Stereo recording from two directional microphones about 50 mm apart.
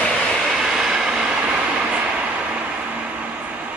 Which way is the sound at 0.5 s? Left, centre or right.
Centre.